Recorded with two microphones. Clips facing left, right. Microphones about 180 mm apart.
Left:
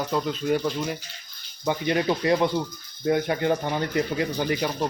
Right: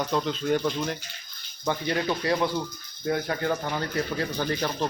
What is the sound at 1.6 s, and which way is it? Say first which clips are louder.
Speech: left 3 dB; 15° left (ahead or behind).